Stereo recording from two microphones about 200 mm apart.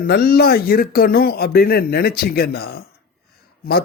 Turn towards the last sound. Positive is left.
turn(degrees=50)  # may be behind; listen again after turning